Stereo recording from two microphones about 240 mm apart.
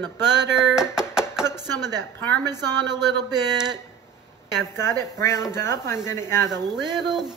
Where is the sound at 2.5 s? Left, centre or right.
Centre.